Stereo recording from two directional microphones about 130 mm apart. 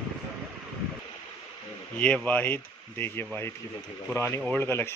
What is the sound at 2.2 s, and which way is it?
Speech, 15° left (ahead or behind).